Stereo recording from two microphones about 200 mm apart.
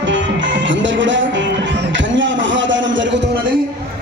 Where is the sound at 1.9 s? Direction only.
65° right (ahead or behind).